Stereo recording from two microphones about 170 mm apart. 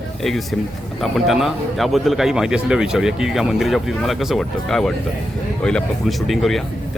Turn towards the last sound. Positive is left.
turn(degrees=0)  # may be behind; listen again after turning